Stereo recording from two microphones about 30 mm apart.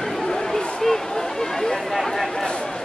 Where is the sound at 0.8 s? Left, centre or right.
Centre.